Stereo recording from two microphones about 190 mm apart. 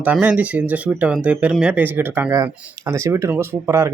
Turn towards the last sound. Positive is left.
turn(degrees=-15)  # may be behind; listen again after turning